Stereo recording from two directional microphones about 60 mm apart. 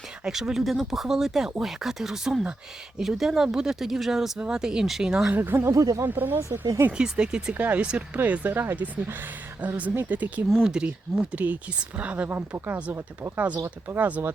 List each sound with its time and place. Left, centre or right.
0.3 s speech: centre
5.3 s speech: right
5.7 s speech: right
6.1 s speech: right
6.9 s speech: centre
7.5 s speech: right
10.6 s speech: centre; by 13.6 s right
13.8 s speech: right